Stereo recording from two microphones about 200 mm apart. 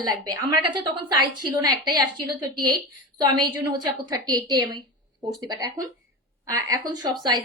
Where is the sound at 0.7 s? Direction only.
20° right (ahead or behind).